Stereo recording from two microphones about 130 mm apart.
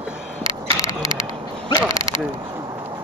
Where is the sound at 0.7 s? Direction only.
25° left (ahead or behind).